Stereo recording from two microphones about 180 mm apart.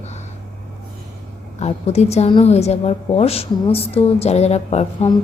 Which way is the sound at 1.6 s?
35° left (ahead or behind).